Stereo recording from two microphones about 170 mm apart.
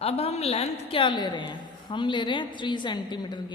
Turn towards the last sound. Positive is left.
turn(degrees=25)  # may be behind; listen again after turning